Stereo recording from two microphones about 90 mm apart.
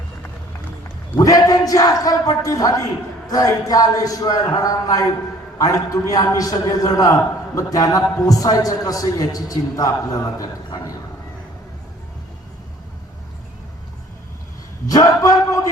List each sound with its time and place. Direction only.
1.2 s a man's voice: 40° left (ahead or behind)
14.8 s a man's voice: 40° left (ahead or behind)